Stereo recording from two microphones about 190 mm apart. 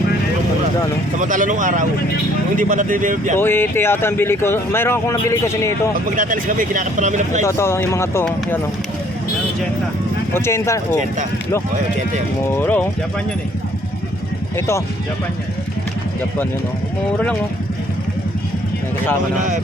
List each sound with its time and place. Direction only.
1.2 s speech: 45° right (ahead or behind)
3.3 s speech: 10° left (ahead or behind)
6.1 s speech: 45° right (ahead or behind)
7.4 s speech: 15° left (ahead or behind)
10.3 s speech: 15° left (ahead or behind)
12.5 s speech: 10° left (ahead or behind)